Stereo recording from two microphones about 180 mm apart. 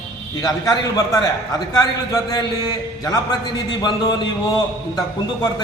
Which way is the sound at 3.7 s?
25° left (ahead or behind).